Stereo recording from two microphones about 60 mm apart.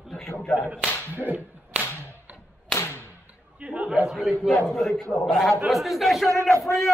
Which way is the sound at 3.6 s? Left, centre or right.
Right.